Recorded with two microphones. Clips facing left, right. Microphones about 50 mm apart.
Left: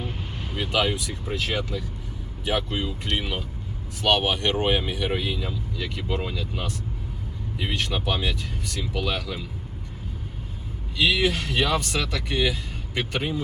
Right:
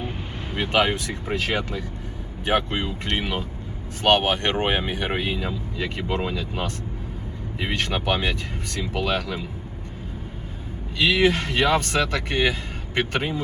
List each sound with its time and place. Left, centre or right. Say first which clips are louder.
0.5 s speech: right 3 dB; right
10.9 s speech: right 3 dB; right